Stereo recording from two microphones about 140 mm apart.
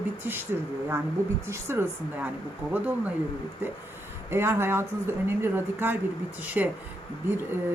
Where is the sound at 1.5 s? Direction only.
15° right (ahead or behind).